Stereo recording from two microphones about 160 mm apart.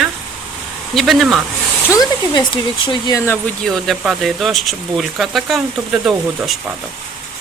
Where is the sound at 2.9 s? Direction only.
25° left (ahead or behind).